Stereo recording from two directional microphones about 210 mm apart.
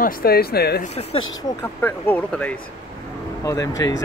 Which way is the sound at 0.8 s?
30° left (ahead or behind).